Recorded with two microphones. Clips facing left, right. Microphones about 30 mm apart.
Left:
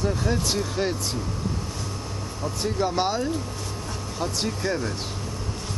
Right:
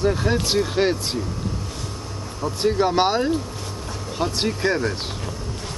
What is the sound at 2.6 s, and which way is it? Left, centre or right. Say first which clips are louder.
Speech: right 6 dB; right.